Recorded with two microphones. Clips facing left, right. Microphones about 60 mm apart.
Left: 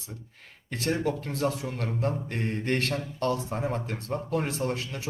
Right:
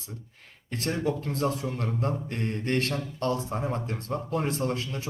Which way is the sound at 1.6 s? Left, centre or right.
Left.